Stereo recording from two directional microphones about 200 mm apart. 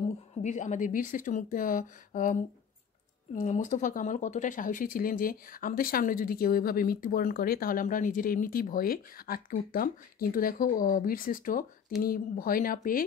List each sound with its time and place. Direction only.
0.4 s speech: 35° left (ahead or behind)
3.3 s speech: 40° left (ahead or behind)